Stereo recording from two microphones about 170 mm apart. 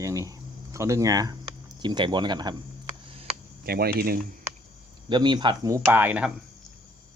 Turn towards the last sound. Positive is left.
turn(degrees=-10)  # may be behind; listen again after turning